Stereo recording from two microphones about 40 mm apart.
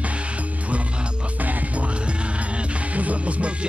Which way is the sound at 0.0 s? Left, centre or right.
Right.